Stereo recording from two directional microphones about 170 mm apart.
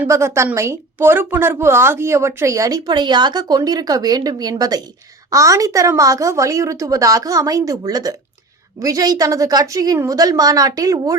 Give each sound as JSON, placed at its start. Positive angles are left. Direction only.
{"t": 0.0, "sound": "a woman's voice", "side_deg": -15}